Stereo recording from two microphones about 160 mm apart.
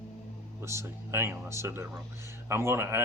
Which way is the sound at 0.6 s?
15° right (ahead or behind).